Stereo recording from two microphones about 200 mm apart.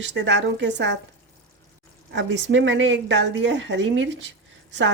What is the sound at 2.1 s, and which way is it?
A woman's voice, 65° right (ahead or behind).